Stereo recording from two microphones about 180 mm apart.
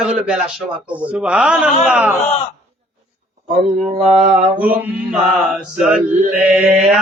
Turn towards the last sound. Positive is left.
turn(degrees=-10)  # may be behind; listen again after turning